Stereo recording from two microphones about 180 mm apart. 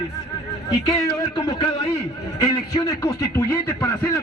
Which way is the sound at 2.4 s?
20° left (ahead or behind).